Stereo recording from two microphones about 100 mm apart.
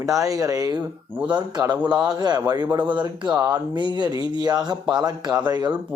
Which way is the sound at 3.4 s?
40° right (ahead or behind).